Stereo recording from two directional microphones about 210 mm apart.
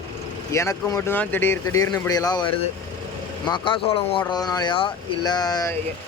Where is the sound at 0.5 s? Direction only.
15° left (ahead or behind).